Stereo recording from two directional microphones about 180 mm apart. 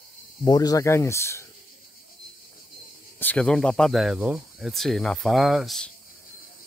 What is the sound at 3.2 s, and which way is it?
Speech, 5° left (ahead or behind).